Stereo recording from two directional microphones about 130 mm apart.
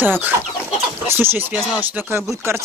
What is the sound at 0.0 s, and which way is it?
Speech, 15° right (ahead or behind).